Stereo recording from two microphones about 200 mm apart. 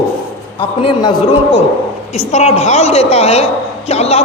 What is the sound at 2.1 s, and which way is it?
A woman's voice, 35° left (ahead or behind).